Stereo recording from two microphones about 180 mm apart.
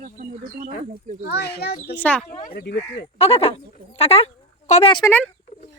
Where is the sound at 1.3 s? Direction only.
65° left (ahead or behind).